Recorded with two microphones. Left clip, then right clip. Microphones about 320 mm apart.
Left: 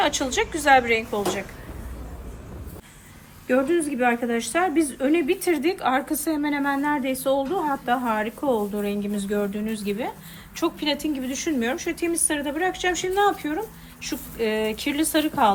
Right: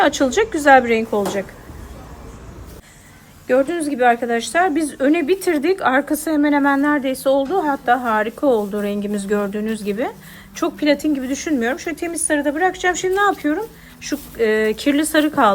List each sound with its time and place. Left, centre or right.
0.0 s speech: right
3.4 s speech: right